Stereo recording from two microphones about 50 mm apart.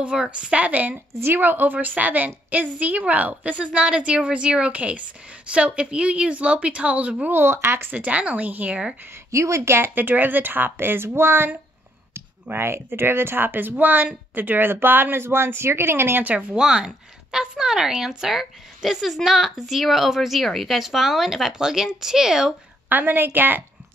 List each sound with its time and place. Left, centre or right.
0.0 s a woman's voice: right
0.9 s a woman's voice: right
1.4 s a woman's voice: right
7.2 s speech: right
7.9 s a woman's voice: right
9.1 s speech: right
9.8 s speech: right
12.5 s speech: right
16.3 s a woman's voice: right
16.5 s speech: centre
22.8 s a woman's voice: right